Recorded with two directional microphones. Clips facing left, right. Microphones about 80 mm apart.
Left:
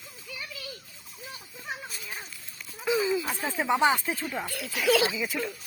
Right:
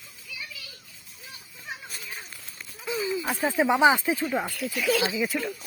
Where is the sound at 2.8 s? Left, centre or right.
Left.